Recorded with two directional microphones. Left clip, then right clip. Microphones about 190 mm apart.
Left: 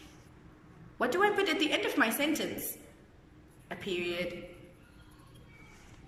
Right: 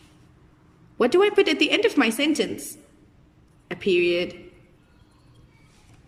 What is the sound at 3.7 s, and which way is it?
Speech, 50° right (ahead or behind).